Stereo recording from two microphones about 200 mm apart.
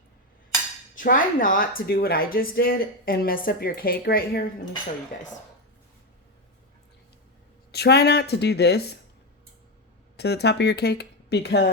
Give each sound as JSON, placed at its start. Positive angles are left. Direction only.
{"t": 0.9, "sound": "speech", "side_deg": 45}
{"t": 7.7, "sound": "speech", "side_deg": 55}
{"t": 10.2, "sound": "speech", "side_deg": 55}